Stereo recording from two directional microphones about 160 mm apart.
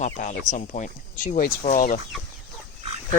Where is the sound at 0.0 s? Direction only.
50° left (ahead or behind).